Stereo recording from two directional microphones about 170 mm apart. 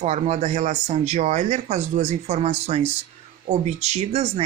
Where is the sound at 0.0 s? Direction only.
45° right (ahead or behind).